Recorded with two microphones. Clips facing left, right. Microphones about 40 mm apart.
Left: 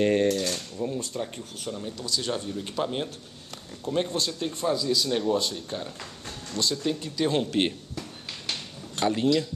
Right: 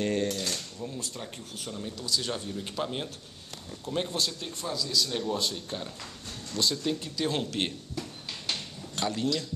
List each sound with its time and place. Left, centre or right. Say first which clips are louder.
0.0 s speech: left 6 dB; left
0.3 s mechanisms: left 6 dB; centre
0.9 s speech: left 6 dB; centre
5.0 s speech: left 5 dB; centre
7.9 s a sound: even; centre
9.0 s speech: left 6 dB; left